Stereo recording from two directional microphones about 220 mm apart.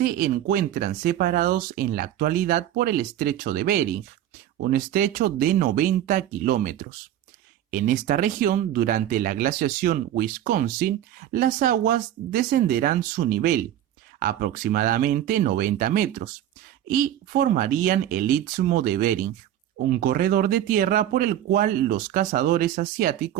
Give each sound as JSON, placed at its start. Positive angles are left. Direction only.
{"t": 0.0, "sound": "speech", "side_deg": -40}